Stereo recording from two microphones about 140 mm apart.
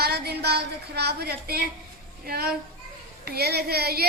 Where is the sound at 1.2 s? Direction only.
90° right.